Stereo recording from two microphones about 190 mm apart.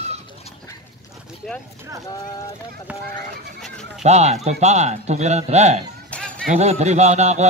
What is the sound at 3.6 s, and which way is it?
Goat, centre (ahead or behind).